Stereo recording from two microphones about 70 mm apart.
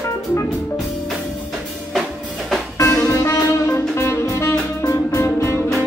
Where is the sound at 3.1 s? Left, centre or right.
Left.